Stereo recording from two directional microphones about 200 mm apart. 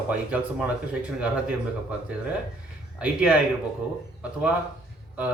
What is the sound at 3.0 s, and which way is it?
Speech, 5° right (ahead or behind).